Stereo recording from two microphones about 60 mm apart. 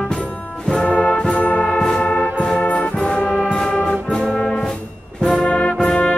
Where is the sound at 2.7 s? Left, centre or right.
Centre.